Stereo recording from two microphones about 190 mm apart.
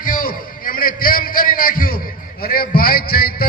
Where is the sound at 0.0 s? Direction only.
45° left (ahead or behind).